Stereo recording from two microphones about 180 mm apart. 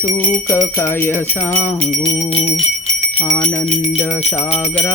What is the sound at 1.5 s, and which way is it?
Jingle bell, 45° left (ahead or behind).